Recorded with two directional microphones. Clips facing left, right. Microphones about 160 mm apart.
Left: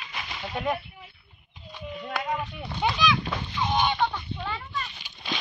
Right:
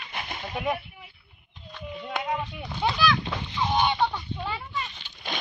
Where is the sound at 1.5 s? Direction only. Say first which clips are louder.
Even; 10° left (ahead or behind).